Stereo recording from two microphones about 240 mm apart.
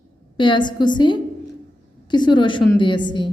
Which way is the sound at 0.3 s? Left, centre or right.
Centre.